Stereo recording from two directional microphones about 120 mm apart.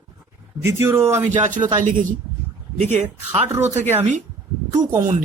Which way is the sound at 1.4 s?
90° right.